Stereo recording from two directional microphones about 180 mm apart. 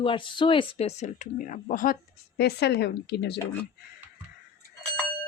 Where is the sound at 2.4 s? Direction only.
65° left (ahead or behind).